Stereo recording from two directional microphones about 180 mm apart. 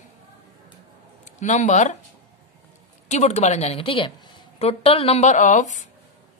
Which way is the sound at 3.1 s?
40° left (ahead or behind).